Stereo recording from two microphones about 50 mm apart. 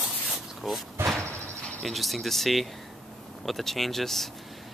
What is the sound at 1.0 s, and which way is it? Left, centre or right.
Cricket, right.